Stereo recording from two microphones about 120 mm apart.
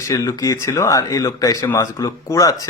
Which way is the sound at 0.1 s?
25° left (ahead or behind).